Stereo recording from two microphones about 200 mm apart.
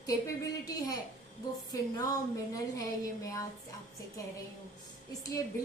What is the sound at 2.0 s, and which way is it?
A woman's voice, 20° left (ahead or behind).